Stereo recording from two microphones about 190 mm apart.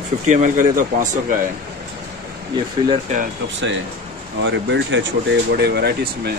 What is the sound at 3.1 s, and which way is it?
Speech, 40° right (ahead or behind).